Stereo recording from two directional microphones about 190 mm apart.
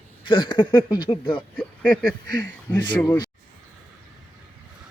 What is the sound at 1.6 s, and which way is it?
Speech, 5° left (ahead or behind).